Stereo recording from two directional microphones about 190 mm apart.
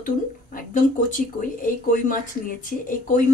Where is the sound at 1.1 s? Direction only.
45° left (ahead or behind).